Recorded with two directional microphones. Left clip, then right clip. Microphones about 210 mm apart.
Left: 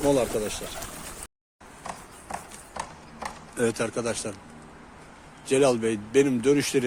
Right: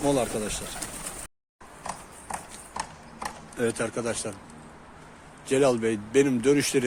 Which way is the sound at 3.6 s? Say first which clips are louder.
Left 2 dB; 10° left (ahead or behind).